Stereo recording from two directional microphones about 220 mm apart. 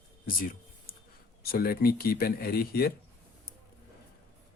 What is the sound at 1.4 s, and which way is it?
Speech, 45° left (ahead or behind).